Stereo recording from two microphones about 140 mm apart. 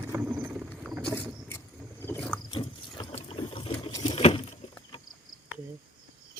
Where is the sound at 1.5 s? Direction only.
15° left (ahead or behind).